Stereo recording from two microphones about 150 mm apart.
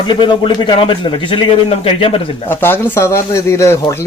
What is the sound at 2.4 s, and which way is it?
Speech, 15° left (ahead or behind).